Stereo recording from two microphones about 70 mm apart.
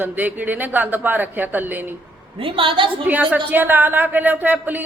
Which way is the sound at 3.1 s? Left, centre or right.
Right.